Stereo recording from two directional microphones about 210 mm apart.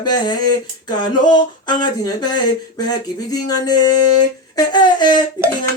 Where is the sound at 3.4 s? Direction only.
20° left (ahead or behind).